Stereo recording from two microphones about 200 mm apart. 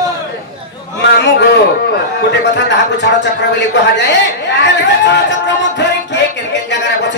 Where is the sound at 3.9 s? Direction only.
60° left (ahead or behind).